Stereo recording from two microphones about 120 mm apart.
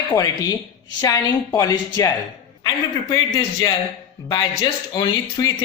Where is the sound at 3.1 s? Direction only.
30° left (ahead or behind).